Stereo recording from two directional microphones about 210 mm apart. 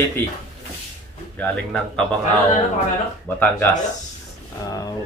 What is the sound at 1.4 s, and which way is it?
Speech, 5° left (ahead or behind).